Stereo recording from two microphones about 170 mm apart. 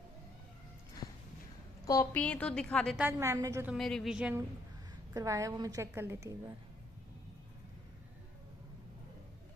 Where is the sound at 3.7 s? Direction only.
Centre (ahead or behind).